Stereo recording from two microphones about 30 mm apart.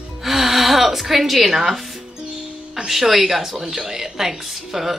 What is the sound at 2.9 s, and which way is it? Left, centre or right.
Speech, centre.